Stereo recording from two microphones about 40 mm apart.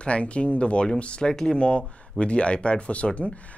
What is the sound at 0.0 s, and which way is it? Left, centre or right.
Speech, left.